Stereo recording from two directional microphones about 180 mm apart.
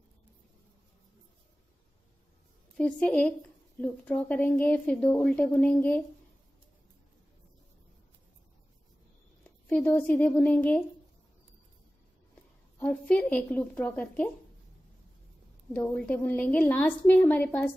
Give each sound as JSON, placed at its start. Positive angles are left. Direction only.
{"t": 2.8, "sound": "a woman's voice", "side_deg": 5}
{"t": 9.4, "sound": "speech", "side_deg": 5}
{"t": 12.7, "sound": "a woman's voice", "side_deg": 10}
{"t": 15.7, "sound": "a woman's voice", "side_deg": 5}